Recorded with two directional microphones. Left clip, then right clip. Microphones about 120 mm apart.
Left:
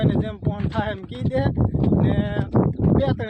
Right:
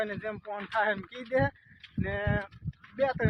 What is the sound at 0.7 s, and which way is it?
Speech, 25° left (ahead or behind).